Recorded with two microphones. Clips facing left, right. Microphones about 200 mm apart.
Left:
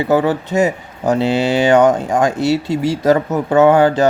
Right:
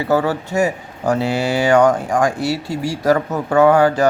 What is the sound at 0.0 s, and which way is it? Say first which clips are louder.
Speech: left 3 dB; 20° left (ahead or behind).